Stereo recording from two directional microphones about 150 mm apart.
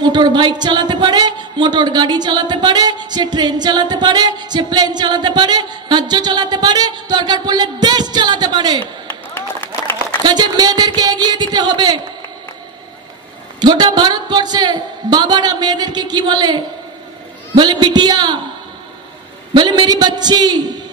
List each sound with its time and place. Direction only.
0.0 s a woman's voice: 30° right (ahead or behind)
9.0 s run: 10° left (ahead or behind)
10.2 s a woman's voice: 30° right (ahead or behind)
13.6 s a woman's voice: 30° right (ahead or behind)
19.5 s a woman's voice: 30° right (ahead or behind)